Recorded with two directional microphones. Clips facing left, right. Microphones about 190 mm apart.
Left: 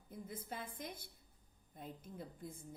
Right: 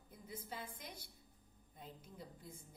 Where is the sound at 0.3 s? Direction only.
50° left (ahead or behind).